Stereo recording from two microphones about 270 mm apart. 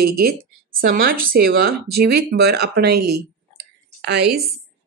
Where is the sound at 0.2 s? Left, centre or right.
Right.